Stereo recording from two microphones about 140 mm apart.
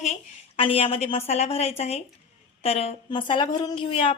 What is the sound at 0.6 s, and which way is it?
Speech, 40° left (ahead or behind).